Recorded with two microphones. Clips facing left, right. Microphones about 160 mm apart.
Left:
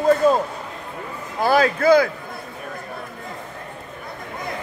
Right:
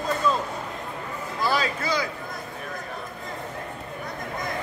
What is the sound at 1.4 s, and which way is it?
Speech, 55° left (ahead or behind).